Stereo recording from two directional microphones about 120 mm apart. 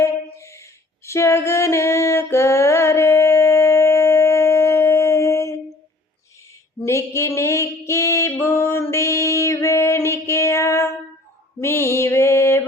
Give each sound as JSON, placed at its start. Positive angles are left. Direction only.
{"t": 0.0, "sound": "female singing", "side_deg": 25}
{"t": 6.8, "sound": "a sound", "side_deg": 25}
{"t": 11.6, "sound": "mantra", "side_deg": 20}